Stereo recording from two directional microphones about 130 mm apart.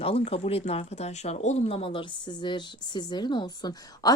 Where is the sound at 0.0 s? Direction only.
45° left (ahead or behind).